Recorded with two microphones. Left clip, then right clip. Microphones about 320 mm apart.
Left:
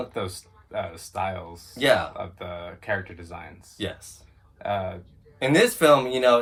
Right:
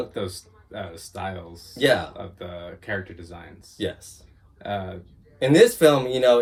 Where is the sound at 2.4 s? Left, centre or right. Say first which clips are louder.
Left 1 dB; left.